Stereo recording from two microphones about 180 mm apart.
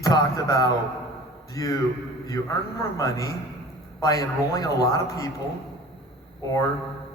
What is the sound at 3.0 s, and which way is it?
A man's voice, 20° left (ahead or behind).